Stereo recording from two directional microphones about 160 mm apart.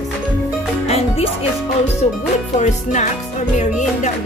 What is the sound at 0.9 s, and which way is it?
Music, 40° left (ahead or behind).